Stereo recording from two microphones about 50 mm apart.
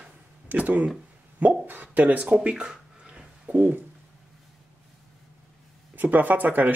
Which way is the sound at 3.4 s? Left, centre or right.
Right.